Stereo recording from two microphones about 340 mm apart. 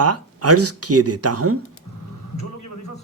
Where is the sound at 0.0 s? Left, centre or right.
Right.